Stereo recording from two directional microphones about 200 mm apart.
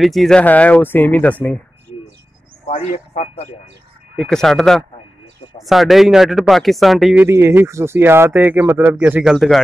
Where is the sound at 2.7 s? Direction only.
35° left (ahead or behind).